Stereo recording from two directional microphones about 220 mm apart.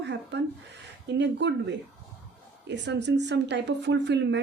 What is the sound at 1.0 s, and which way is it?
A woman's voice, 50° right (ahead or behind).